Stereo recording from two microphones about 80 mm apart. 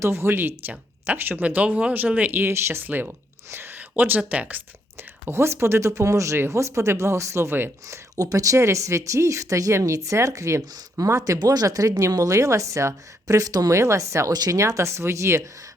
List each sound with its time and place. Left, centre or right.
0.0 s speech: right
5.2 s speech: right
7.9 s speech: right
14.3 s speech: right
14.6 s speech: right